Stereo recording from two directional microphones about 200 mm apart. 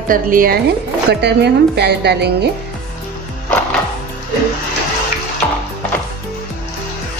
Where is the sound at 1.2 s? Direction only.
55° right (ahead or behind).